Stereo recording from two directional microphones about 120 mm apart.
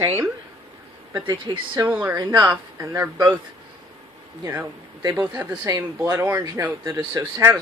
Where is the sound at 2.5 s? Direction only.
20° right (ahead or behind).